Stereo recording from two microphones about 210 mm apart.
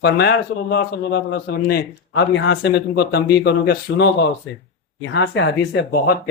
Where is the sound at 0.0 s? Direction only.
55° left (ahead or behind).